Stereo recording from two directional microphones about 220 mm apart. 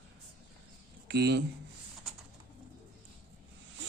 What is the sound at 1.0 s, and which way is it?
Speech, 50° right (ahead or behind).